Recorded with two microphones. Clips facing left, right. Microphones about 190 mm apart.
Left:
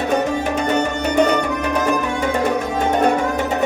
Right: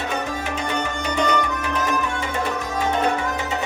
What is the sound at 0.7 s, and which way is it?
Music, 50° left (ahead or behind).